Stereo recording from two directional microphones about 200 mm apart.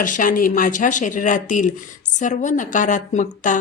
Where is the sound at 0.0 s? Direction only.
40° left (ahead or behind).